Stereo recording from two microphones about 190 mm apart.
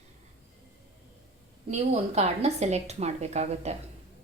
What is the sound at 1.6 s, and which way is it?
A woman's voice, 35° right (ahead or behind).